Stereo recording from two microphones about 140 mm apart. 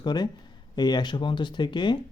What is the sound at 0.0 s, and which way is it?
A man's voice, 30° left (ahead or behind).